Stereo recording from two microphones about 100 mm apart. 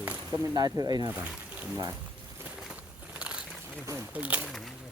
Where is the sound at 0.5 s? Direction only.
40° right (ahead or behind).